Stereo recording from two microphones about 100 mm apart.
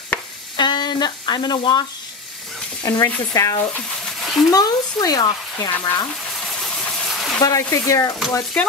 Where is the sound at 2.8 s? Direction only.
35° left (ahead or behind).